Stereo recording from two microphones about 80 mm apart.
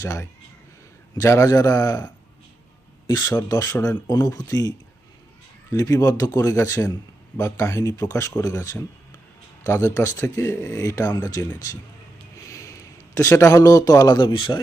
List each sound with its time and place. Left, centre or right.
0.0 s speech: left
3.1 s speech: left
5.7 s speech: left
12.5 s a sound: left
14.2 s a man's voice: left